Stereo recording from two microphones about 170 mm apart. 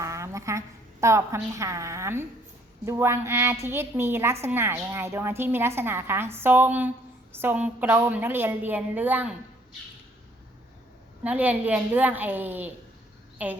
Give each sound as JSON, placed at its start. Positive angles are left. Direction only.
{"t": 0.0, "sound": "a sound", "side_deg": -15}
{"t": 1.0, "sound": "a woman's voice", "side_deg": -15}
{"t": 11.2, "sound": "a woman's voice", "side_deg": -10}